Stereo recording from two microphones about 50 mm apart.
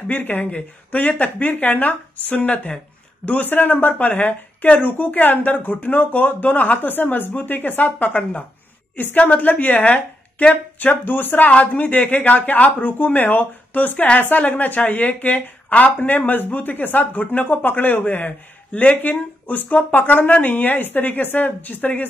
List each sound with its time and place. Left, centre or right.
0.1 s speech: left
3.3 s speech: left
11.5 s a woman's voice: left
18.7 s speech: left
19.0 s speech: left